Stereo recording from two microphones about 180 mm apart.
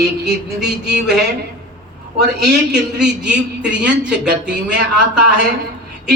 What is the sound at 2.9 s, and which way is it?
A man's voice, 5° right (ahead or behind).